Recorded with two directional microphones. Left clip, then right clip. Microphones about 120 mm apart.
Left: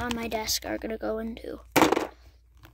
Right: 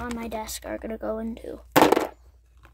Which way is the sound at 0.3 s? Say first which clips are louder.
Left 3 dB; 25° left (ahead or behind).